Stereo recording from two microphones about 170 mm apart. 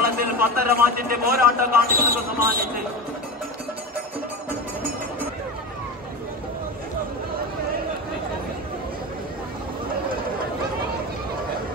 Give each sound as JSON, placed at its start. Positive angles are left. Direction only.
{"t": 0.0, "sound": "a man's voice", "side_deg": -60}